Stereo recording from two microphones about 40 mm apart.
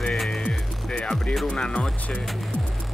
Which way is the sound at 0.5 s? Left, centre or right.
Left.